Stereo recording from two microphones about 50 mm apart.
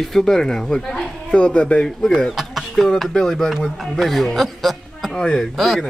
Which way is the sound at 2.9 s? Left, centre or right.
Centre.